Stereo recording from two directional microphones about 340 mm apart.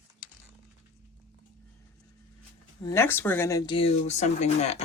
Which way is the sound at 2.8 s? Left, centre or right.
Centre.